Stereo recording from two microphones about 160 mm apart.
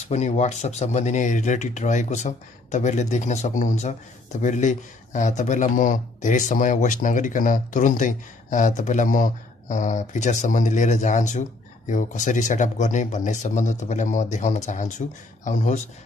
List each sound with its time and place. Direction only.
0.0 s speech: 45° left (ahead or behind)